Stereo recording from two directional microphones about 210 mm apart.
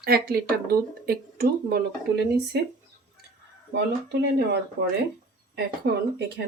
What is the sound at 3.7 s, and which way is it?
Speech, 55° right (ahead or behind).